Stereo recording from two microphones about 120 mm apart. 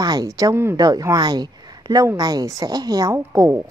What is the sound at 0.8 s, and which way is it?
A woman's voice, 30° right (ahead or behind).